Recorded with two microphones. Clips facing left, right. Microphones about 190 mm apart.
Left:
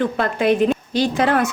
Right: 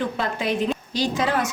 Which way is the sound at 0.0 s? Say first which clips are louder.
Left 6 dB; 55° left (ahead or behind).